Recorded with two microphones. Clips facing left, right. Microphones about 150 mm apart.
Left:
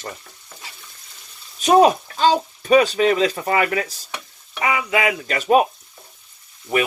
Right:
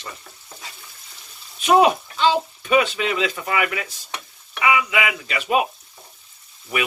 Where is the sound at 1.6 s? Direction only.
40° left (ahead or behind).